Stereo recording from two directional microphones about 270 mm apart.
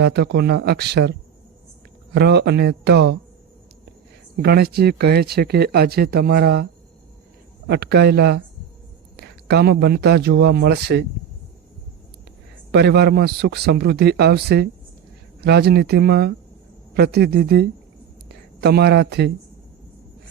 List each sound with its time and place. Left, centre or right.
0.0 s speech: right
2.1 s speech: right
4.4 s speech: right
7.7 s a man's voice: right
12.7 s speech: right